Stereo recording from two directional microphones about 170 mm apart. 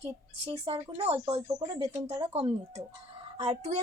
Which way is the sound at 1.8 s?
20° right (ahead or behind).